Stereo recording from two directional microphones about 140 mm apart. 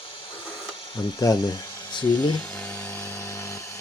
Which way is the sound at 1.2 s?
25° left (ahead or behind).